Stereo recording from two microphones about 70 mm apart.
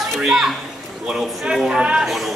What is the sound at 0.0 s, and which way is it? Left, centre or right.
Children playing, centre.